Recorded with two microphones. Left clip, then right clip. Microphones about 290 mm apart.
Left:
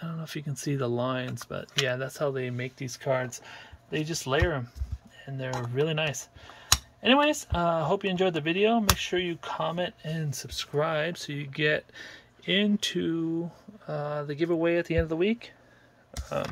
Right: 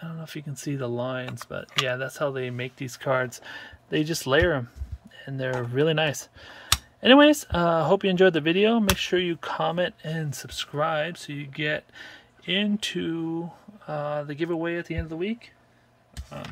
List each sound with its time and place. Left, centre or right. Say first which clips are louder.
0.0 s speech: even; centre